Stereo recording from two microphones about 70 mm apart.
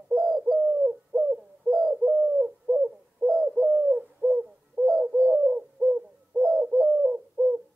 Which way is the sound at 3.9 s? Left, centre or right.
Right.